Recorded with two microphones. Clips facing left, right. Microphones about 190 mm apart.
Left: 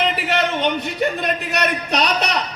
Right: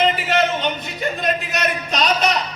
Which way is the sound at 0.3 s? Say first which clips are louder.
Even; 60° left (ahead or behind).